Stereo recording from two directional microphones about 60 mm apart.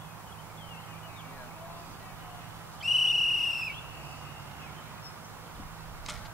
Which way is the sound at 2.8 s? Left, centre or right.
Centre.